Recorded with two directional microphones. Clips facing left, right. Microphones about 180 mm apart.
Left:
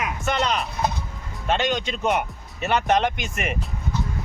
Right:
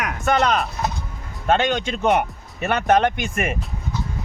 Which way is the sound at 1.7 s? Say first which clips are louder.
Right 4 dB; 55° right (ahead or behind).